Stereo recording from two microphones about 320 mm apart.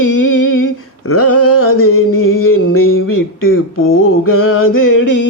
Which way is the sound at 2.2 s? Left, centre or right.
Left.